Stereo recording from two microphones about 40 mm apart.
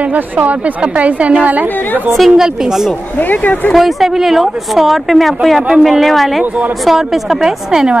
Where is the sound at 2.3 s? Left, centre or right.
Centre.